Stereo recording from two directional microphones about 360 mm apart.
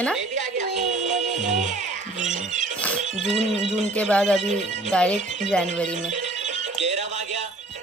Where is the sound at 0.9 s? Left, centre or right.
Centre.